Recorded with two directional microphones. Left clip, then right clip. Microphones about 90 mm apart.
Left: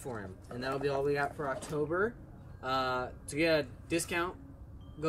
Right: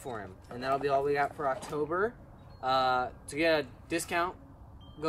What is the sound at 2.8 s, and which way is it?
Speech, 35° right (ahead or behind).